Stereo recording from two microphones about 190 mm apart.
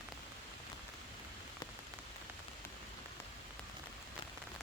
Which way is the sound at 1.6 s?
20° left (ahead or behind).